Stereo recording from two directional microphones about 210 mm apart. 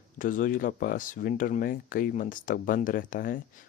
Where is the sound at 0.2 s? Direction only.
40° left (ahead or behind).